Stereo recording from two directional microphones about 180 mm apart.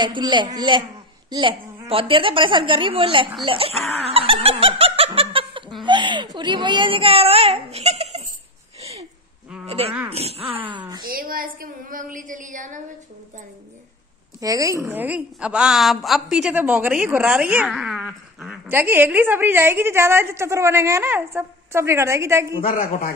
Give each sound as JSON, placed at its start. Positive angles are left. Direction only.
{"t": 0.0, "sound": "a woman's voice", "side_deg": -25}
{"t": 4.0, "sound": "laughter", "side_deg": -35}
{"t": 9.7, "sound": "speech", "side_deg": -35}
{"t": 11.1, "sound": "a woman's voice", "side_deg": -55}
{"t": 14.4, "sound": "speech", "side_deg": -20}
{"t": 22.8, "sound": "a man's voice", "side_deg": 55}